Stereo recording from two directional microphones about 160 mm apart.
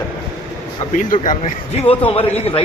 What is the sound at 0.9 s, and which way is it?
A man's voice, 55° left (ahead or behind).